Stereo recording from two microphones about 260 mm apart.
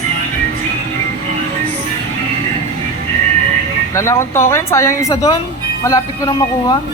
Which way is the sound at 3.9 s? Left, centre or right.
Centre.